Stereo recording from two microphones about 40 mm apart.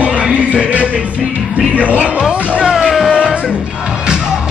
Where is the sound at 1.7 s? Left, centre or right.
Right.